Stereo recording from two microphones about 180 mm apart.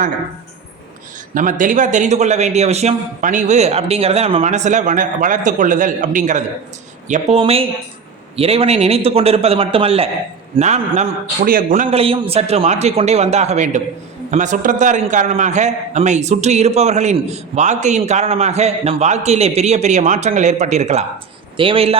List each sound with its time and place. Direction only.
1.3 s a man's voice: 45° right (ahead or behind); by 21.9 s 30° right (ahead or behind)